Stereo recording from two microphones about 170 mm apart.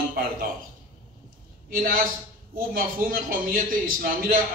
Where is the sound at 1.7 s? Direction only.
55° right (ahead or behind).